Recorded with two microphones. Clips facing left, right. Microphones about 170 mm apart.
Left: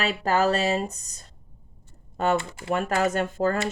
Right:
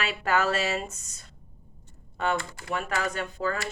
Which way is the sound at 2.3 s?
25° left (ahead or behind).